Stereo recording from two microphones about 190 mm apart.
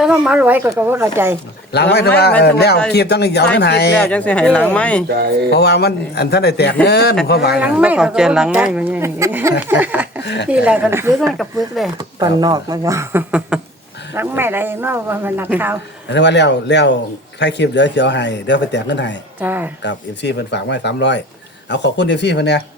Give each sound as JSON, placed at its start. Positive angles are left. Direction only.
{"t": 0.0, "sound": "speech", "side_deg": -5}
{"t": 1.7, "sound": "speech", "side_deg": 60}
{"t": 3.9, "sound": "speech", "side_deg": 5}
{"t": 5.0, "sound": "speech", "side_deg": -55}
{"t": 5.5, "sound": "speech", "side_deg": 60}
{"t": 7.5, "sound": "speech", "side_deg": -5}
{"t": 10.2, "sound": "speech", "side_deg": 65}
{"t": 10.5, "sound": "speech", "side_deg": -5}
{"t": 11.9, "sound": "speech", "side_deg": -20}
{"t": 16.0, "sound": "speech", "side_deg": 65}
{"t": 19.4, "sound": "speech", "side_deg": -10}
{"t": 19.8, "sound": "speech", "side_deg": 65}